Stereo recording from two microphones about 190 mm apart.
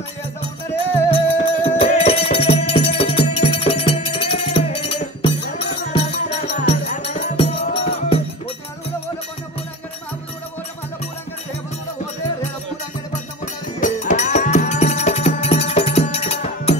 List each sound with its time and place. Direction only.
0.9 s music: 30° left (ahead or behind)
6.5 s music: 35° left (ahead or behind)
13.7 s music: 40° left (ahead or behind)